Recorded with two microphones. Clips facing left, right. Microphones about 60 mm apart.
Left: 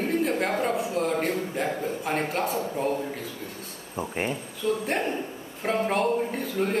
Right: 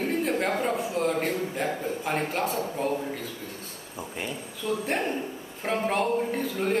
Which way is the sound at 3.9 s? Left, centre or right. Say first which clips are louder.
Left 6 dB; left.